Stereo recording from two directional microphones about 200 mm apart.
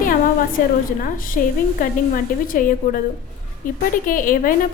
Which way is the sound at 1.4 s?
45° left (ahead or behind).